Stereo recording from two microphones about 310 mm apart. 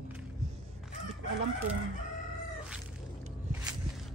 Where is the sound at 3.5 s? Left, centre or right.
Centre.